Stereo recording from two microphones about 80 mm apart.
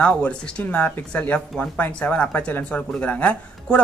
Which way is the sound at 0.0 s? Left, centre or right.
Centre.